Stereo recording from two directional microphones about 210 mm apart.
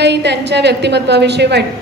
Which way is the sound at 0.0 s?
55° right (ahead or behind).